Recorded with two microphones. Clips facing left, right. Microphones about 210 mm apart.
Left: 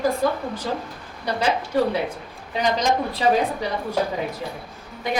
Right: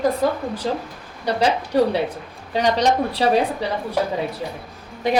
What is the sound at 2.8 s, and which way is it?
Speech, 75° right (ahead or behind).